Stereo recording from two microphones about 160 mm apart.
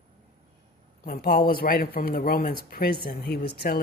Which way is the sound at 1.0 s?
65° left (ahead or behind).